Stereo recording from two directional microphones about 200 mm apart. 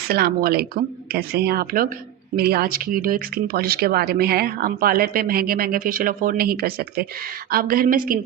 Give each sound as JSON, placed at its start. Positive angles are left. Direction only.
{"t": 0.1, "sound": "speech", "side_deg": -50}